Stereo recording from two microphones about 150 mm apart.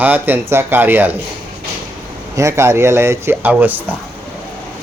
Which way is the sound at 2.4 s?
20° right (ahead or behind).